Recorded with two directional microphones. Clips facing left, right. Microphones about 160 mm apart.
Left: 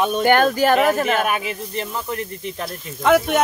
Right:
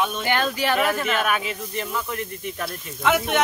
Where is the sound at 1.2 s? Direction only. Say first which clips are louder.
Left 2 dB; 25° left (ahead or behind).